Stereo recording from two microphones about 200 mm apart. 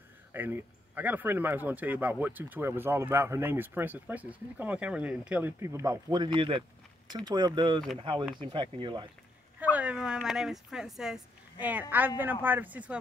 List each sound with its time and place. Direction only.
0.3 s speech: 10° right (ahead or behind)
9.6 s speech: 5° right (ahead or behind)
12.2 s speech: 10° right (ahead or behind)